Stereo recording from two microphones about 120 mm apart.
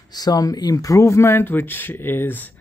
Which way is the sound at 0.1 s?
35° left (ahead or behind).